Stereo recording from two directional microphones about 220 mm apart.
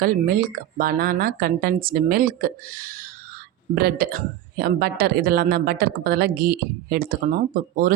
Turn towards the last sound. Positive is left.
turn(degrees=-40)  # may be behind; listen again after turning